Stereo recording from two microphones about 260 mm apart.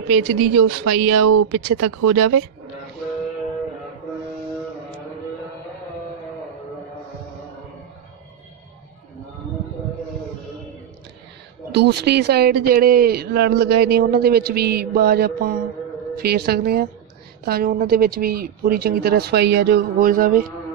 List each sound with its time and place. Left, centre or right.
0.1 s speech: right
11.7 s speech: right